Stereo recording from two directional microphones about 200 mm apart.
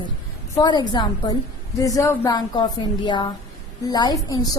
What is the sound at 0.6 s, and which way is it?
A woman's voice, 20° left (ahead or behind).